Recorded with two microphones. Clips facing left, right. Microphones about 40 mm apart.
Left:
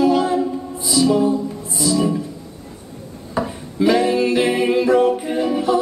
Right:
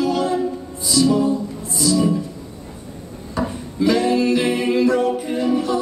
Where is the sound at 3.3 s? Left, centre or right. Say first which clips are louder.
Left 1 dB; centre.